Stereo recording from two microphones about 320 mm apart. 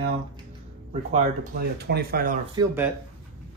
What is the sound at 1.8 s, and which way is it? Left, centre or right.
Speech, right.